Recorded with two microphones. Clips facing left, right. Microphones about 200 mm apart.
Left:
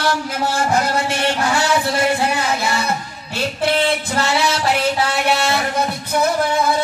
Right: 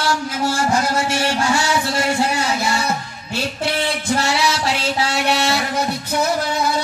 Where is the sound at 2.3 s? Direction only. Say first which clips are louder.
Even; 55° left (ahead or behind).